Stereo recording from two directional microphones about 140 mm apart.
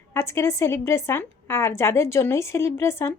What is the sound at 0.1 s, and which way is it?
A woman's voice, 20° left (ahead or behind).